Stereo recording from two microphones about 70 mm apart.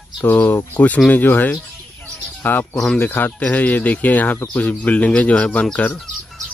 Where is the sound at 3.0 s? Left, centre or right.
Left.